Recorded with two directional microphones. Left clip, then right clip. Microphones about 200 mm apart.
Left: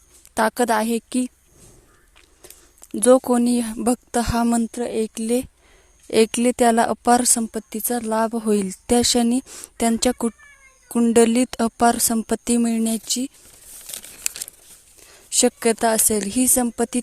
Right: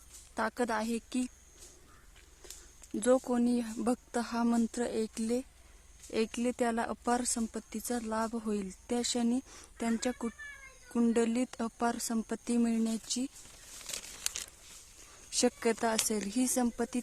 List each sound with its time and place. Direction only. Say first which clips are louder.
0.3 s a woman's voice: left 14 dB; 45° left (ahead or behind)
2.9 s a woman's voice: left 13 dB; 40° left (ahead or behind)
13.9 s crumpling: left 5 dB; 25° left (ahead or behind)
15.3 s a woman's voice: left 11 dB; 30° left (ahead or behind)